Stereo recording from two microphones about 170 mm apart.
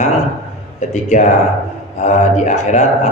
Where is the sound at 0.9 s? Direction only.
45° left (ahead or behind).